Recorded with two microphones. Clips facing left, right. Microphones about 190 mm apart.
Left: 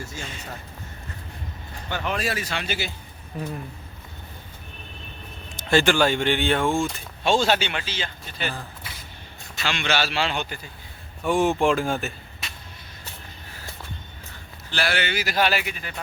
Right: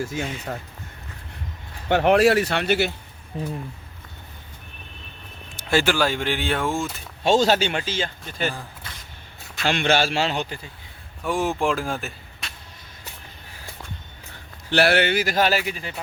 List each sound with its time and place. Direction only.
0.1 s speech: 60° right (ahead or behind)
1.9 s speech: 65° right (ahead or behind)
3.3 s speech: 25° right (ahead or behind)
5.5 s speech: 5° right (ahead or behind)
7.3 s speech: 40° right (ahead or behind)
9.6 s speech: 50° right (ahead or behind); by 10.7 s 30° right (ahead or behind)
11.2 s speech: centre (ahead or behind)
14.7 s speech: 60° right (ahead or behind); by 16.0 s 30° right (ahead or behind)